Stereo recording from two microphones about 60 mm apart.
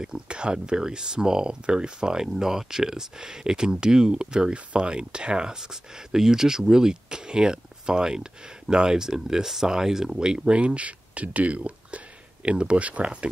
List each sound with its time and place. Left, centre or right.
0.0 s speech: centre